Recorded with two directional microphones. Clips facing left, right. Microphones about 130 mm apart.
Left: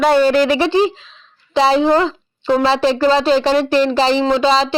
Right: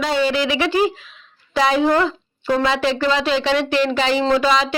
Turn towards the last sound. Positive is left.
turn(degrees=30)  # may be behind; listen again after turning